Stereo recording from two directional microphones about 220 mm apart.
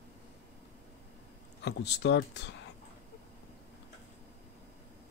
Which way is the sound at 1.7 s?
50° left (ahead or behind).